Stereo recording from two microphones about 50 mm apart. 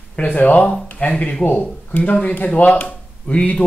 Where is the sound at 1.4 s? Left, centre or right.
Left.